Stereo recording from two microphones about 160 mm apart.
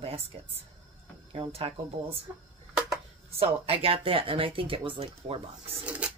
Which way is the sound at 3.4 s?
35° right (ahead or behind).